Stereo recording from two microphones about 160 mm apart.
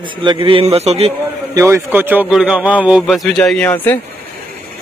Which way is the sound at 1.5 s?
15° right (ahead or behind).